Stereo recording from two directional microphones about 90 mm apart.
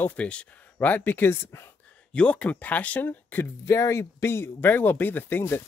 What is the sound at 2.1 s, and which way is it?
Speech, 15° left (ahead or behind).